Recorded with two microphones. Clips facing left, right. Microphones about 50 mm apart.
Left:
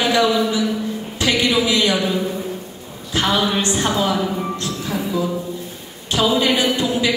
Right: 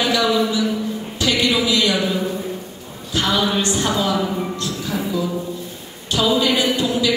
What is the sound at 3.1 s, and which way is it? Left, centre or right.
Speech, left.